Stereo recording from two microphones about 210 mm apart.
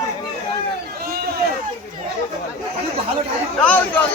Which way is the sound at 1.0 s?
45° right (ahead or behind).